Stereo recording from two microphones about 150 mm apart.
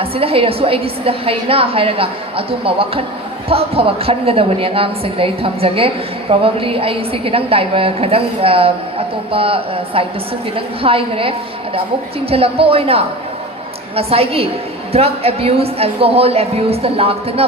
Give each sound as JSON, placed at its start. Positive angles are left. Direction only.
{"t": 0.0, "sound": "a woman's voice", "side_deg": -40}